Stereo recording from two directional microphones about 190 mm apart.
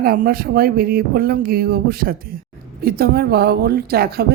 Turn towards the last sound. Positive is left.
turn(degrees=-55)  # may be behind; listen again after turning